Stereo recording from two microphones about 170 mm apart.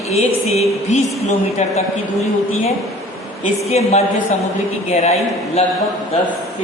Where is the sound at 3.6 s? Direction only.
40° left (ahead or behind).